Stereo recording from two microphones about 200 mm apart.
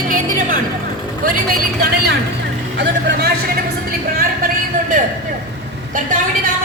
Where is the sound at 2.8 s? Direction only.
55° right (ahead or behind).